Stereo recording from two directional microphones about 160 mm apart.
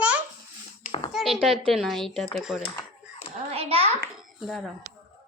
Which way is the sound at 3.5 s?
40° right (ahead or behind).